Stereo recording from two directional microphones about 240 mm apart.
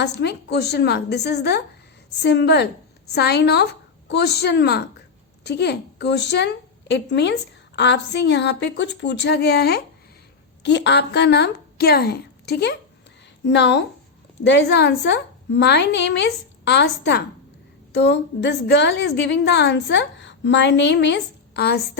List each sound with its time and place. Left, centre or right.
0.0 s a woman's voice: left